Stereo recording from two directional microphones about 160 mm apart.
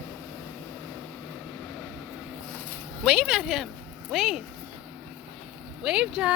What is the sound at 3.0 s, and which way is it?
Speech, centre (ahead or behind).